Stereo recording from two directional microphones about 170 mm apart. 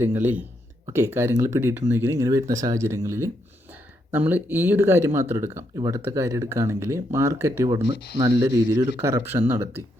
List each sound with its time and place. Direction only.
0.0 s speech: 10° right (ahead or behind)